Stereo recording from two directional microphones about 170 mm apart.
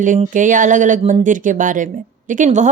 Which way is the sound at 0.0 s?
50° right (ahead or behind).